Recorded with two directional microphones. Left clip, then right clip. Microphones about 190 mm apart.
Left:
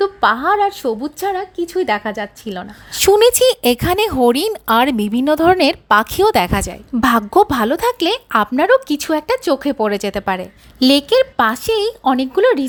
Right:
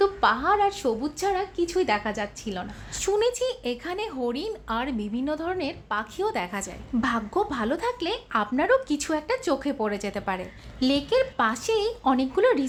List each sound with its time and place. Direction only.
0.0 s a woman's voice: 45° left (ahead or behind)